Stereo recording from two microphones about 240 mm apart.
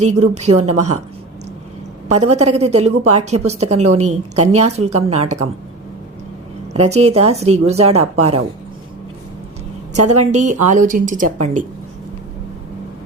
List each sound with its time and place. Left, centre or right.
0.0 s a woman's voice: right
2.1 s a woman's voice: right
6.7 s a woman's voice: right
9.9 s a woman's voice: right